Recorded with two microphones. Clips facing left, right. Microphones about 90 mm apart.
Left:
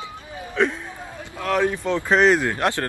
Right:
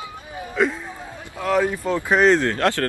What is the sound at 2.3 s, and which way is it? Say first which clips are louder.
Speech: right 1 dB; 10° left (ahead or behind).